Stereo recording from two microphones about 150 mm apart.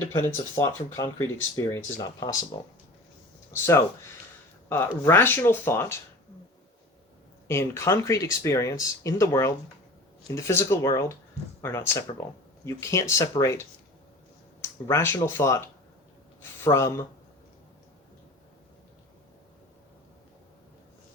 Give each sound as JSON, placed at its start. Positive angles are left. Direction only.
{"t": 0.0, "sound": "speech", "side_deg": 20}
{"t": 5.0, "sound": "speech", "side_deg": 15}
{"t": 7.4, "sound": "speech", "side_deg": 15}